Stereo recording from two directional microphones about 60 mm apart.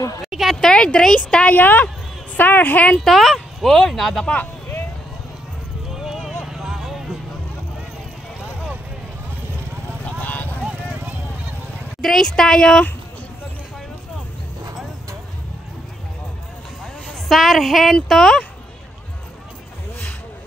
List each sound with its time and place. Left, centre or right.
0.3 s speech: centre
0.6 s speech: centre
1.6 s a woman's voice: left
3.0 s speech: centre
3.8 s a sound: centre
5.9 s clip-clop: centre
6.4 s vehicle: centre
10.2 s clip-clop: left
10.6 s vehicle: right
12.0 s speech: centre
17.3 s a sound: centre